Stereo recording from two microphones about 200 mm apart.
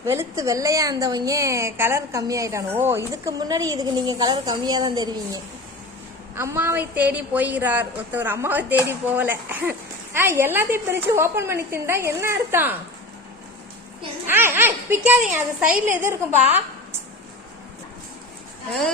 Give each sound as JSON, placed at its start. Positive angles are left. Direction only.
{"t": 0.0, "sound": "a woman's voice", "side_deg": -15}
{"t": 14.3, "sound": "a woman's voice", "side_deg": -10}